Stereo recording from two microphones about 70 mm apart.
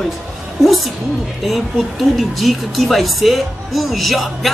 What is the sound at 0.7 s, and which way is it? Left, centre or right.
Speech, centre.